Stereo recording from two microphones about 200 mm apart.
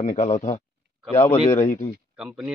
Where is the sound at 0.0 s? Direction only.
35° left (ahead or behind).